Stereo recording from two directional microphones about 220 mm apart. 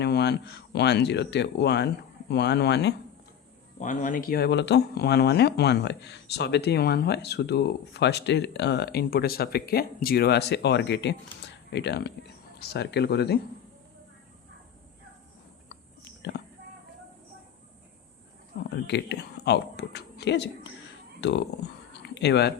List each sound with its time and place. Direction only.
0.0 s speech: 50° left (ahead or behind)
3.8 s speech: 35° left (ahead or behind)
16.2 s speech: 50° left (ahead or behind)
18.7 s speech: 50° left (ahead or behind)